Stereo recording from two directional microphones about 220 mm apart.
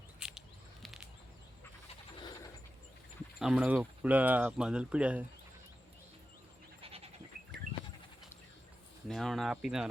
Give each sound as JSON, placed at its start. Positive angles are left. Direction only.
{"t": 0.2, "sound": "a sound", "side_deg": -5}
{"t": 3.3, "sound": "speech", "side_deg": -5}
{"t": 6.8, "sound": "goat", "side_deg": -25}
{"t": 9.0, "sound": "speech", "side_deg": 0}